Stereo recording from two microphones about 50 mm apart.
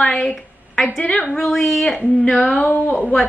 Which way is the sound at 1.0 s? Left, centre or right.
Left.